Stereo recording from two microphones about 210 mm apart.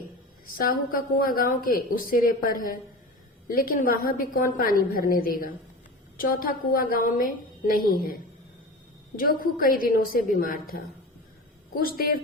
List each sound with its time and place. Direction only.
0.4 s a woman's voice: 45° left (ahead or behind)